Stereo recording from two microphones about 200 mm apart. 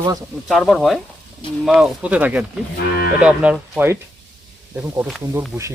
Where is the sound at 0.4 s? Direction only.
Centre (ahead or behind).